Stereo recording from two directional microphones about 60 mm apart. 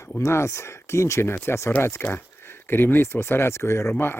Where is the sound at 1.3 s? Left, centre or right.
Left.